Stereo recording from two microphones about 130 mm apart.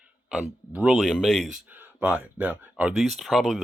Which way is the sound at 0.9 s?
5° left (ahead or behind).